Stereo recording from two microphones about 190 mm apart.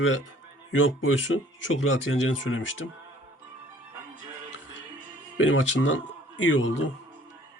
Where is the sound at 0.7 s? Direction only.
90° left.